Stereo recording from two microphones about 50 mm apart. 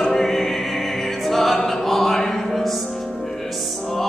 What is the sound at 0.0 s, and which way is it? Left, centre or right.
Music, centre.